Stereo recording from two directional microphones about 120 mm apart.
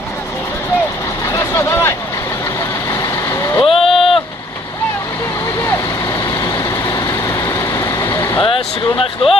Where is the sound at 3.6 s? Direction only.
50° left (ahead or behind).